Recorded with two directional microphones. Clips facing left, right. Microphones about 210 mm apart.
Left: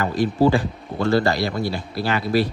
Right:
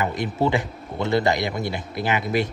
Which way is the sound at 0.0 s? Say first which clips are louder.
Left 5 dB; 20° right (ahead or behind).